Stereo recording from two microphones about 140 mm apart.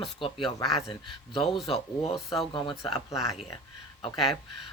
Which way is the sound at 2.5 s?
35° left (ahead or behind).